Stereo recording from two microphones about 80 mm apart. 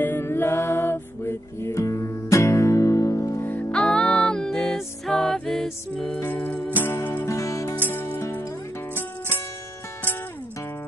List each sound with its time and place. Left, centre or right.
0.0 s music: left
3.7 s music: centre
6.3 s music: left
7.2 s music: left
7.9 s music: left